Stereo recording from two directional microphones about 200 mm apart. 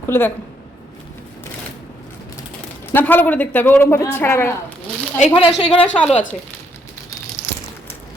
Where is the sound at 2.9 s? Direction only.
10° left (ahead or behind).